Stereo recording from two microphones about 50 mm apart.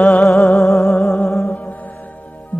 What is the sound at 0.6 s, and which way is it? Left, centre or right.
Music, centre.